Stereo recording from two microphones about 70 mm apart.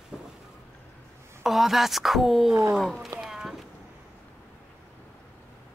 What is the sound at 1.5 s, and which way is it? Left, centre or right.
Speech, centre.